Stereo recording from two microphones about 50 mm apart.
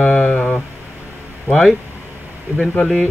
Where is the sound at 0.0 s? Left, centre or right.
Centre.